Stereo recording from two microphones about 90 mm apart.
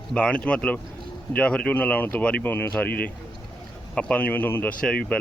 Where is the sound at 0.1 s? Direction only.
10° left (ahead or behind).